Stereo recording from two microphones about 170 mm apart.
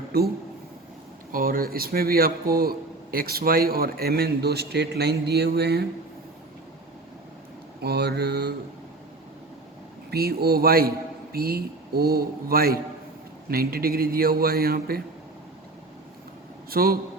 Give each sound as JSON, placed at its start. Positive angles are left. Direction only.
{"t": 1.3, "sound": "a man's voice", "side_deg": -55}
{"t": 7.8, "sound": "a sound", "side_deg": -75}
{"t": 10.1, "sound": "a man's voice", "side_deg": -65}
{"t": 16.6, "sound": "a man's voice", "side_deg": -60}